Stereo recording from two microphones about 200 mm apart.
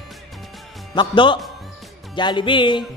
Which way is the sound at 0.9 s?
25° left (ahead or behind).